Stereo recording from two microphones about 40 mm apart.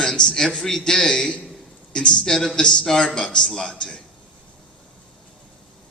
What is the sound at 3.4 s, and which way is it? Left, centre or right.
Speech, centre.